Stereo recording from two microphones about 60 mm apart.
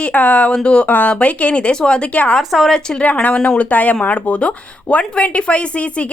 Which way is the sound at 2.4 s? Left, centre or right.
Centre.